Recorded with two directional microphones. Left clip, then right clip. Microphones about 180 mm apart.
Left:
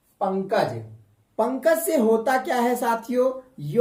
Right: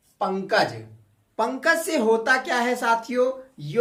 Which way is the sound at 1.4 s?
30° left (ahead or behind).